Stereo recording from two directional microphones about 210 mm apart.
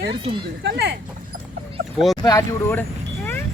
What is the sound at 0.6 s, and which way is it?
Speech, 55° right (ahead or behind).